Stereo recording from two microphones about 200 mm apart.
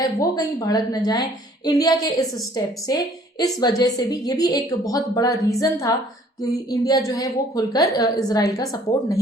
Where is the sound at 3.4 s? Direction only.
20° left (ahead or behind).